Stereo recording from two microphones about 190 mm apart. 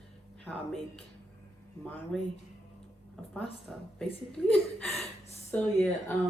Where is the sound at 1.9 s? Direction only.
10° left (ahead or behind).